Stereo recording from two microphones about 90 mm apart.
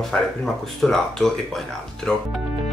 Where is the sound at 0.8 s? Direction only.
5° left (ahead or behind).